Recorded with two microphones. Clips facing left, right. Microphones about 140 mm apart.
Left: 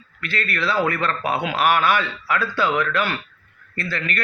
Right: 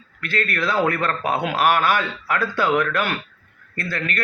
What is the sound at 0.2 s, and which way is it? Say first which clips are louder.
A man's voice: right 2 dB; 45° right (ahead or behind).